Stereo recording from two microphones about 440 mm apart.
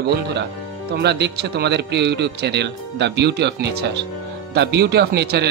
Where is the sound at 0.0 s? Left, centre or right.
Right.